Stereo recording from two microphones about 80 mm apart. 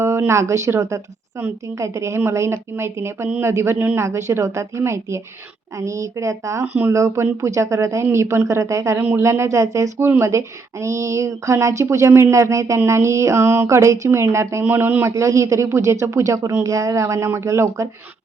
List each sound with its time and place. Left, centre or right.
0.0 s speech: right
15.1 s speech: right